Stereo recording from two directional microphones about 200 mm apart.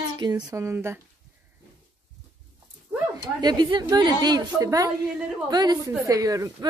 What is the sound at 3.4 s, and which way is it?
A woman's voice, 20° right (ahead or behind).